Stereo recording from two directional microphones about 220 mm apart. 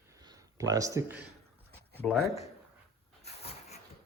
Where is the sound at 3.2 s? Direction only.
30° left (ahead or behind).